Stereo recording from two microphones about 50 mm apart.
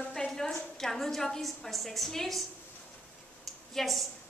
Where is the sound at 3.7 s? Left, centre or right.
Centre.